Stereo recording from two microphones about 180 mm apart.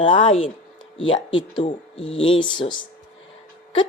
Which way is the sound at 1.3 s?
25° left (ahead or behind).